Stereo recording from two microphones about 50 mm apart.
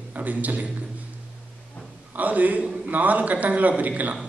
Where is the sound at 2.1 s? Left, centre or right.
Right.